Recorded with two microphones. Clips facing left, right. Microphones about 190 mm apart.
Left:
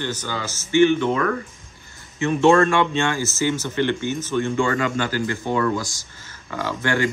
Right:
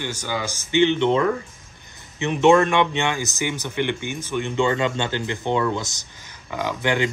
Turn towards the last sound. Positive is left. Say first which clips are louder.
# even
turn(degrees=-15)  # may be behind; listen again after turning